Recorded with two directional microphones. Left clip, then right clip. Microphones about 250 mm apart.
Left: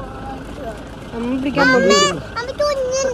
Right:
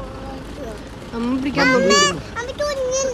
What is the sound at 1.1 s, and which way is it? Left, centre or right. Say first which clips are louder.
A child's voice: left 1 dB; centre.